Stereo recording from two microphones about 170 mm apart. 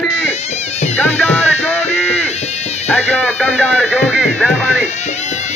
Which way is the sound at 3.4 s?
5° right (ahead or behind).